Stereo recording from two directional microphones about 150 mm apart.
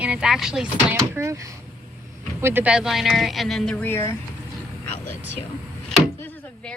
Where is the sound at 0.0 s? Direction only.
5° right (ahead or behind).